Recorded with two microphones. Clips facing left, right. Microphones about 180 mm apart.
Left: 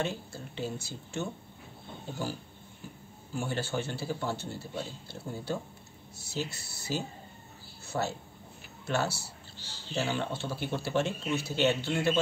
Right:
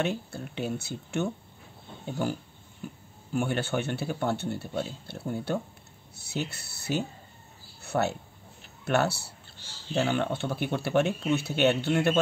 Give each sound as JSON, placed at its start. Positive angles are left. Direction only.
{"t": 0.0, "sound": "speech", "side_deg": -65}
{"t": 3.3, "sound": "speech", "side_deg": -65}